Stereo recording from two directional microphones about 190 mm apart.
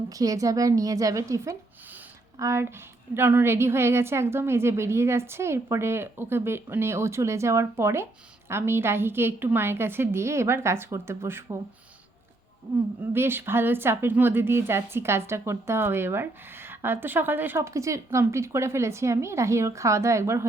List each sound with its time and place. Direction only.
0.1 s a woman's voice: 20° right (ahead or behind)
13.0 s a woman's voice: 10° right (ahead or behind)